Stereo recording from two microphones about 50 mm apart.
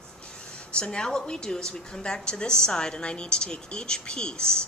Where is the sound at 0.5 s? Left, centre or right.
Left.